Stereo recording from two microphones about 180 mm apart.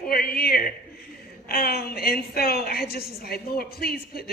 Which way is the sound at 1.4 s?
55° left (ahead or behind).